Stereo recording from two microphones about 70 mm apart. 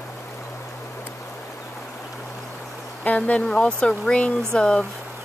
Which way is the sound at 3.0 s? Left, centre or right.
Centre.